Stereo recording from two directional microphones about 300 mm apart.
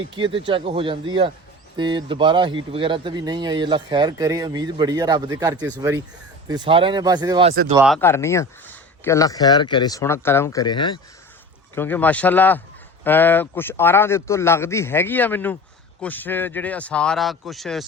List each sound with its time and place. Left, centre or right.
0.1 s speech: centre
7.9 s speech: centre